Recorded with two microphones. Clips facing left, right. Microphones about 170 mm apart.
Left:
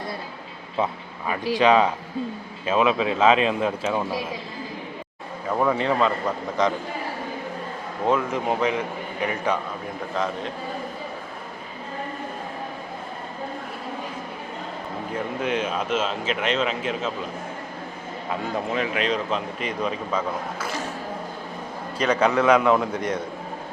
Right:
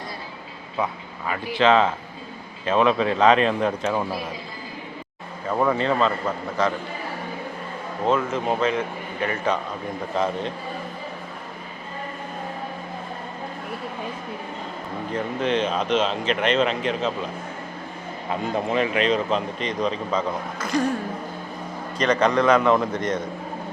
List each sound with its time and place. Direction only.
0.8 s a man's voice: 25° left (ahead or behind)
1.5 s a man's voice: 15° left (ahead or behind)
5.5 s speech: centre (ahead or behind)
5.7 s a man's voice: 15° left (ahead or behind)
8.0 s a man's voice: 15° left (ahead or behind)
15.4 s speech: 10° left (ahead or behind)
18.3 s speech: centre (ahead or behind)
21.9 s a man's voice: 5° left (ahead or behind)